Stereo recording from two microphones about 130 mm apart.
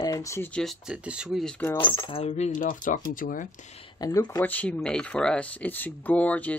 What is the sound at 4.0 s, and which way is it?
Speech, 30° left (ahead or behind).